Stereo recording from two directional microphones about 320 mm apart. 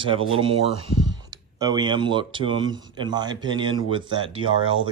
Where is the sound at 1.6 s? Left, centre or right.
Centre.